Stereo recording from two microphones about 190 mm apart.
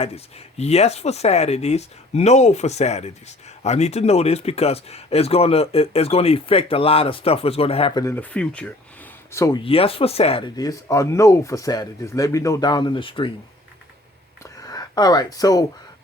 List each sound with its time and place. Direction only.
0.0 s speech: 35° left (ahead or behind)
8.0 s speech: 10° left (ahead or behind)
9.6 s speech: 30° left (ahead or behind)
14.6 s speech: 20° left (ahead or behind)